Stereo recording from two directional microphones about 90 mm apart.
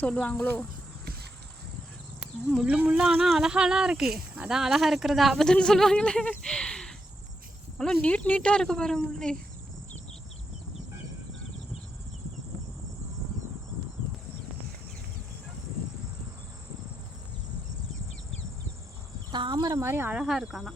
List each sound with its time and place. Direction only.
0.0 s speech: 15° left (ahead or behind)
2.6 s speech: 15° right (ahead or behind); by 9.4 s 5° left (ahead or behind)
19.3 s cricket: 60° right (ahead or behind)
19.7 s speech: 30° right (ahead or behind)
20.1 s speech: 10° right (ahead or behind)